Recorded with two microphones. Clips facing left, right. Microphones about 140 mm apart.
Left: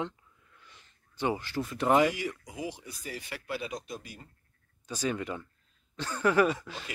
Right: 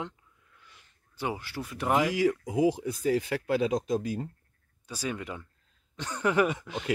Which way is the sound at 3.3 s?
90° right.